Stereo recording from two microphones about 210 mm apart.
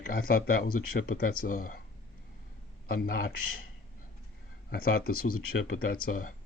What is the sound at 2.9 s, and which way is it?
Speech, 45° left (ahead or behind).